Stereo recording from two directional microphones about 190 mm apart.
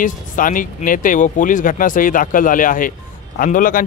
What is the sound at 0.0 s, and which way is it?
A man's voice, 45° left (ahead or behind).